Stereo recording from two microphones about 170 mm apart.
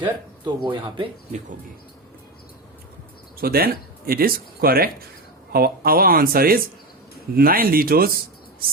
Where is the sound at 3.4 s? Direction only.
60° right (ahead or behind).